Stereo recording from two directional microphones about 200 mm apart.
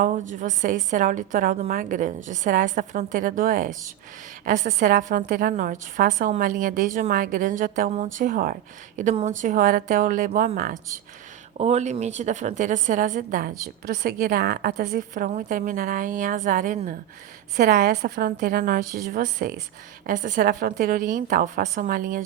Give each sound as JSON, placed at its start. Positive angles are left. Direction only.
{"t": 0.0, "sound": "a woman's voice", "side_deg": -40}